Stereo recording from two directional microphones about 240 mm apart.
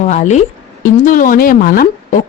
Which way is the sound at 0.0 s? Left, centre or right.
Left.